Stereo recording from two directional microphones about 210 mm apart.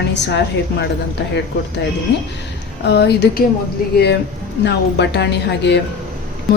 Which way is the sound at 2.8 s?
50° left (ahead or behind).